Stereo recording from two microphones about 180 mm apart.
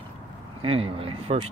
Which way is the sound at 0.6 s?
30° right (ahead or behind).